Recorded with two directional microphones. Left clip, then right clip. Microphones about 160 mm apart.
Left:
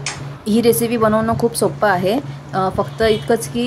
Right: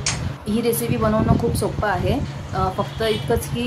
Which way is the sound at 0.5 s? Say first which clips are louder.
Left 7 dB; 40° left (ahead or behind).